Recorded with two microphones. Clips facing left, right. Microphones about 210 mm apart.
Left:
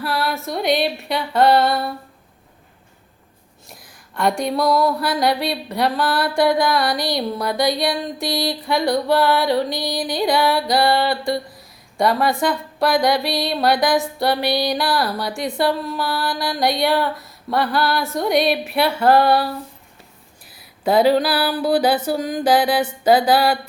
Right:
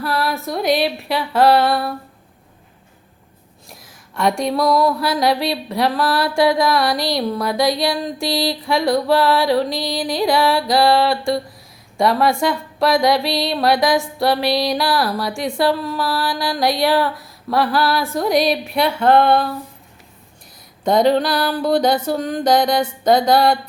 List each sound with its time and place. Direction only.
0.0 s speech: centre (ahead or behind)
3.7 s speech: centre (ahead or behind)
20.8 s speech: 5° left (ahead or behind)